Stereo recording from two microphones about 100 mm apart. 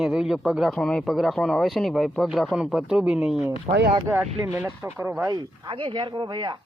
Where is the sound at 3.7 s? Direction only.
60° right (ahead or behind).